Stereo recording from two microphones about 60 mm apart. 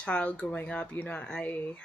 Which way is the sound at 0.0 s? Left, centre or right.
Left.